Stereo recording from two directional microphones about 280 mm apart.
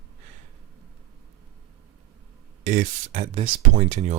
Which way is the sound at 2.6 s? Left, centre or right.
Right.